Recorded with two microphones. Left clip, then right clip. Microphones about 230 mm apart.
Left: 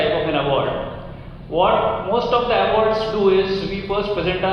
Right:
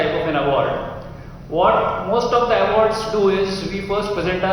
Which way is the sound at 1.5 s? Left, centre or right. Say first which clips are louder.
Right 1 dB; right.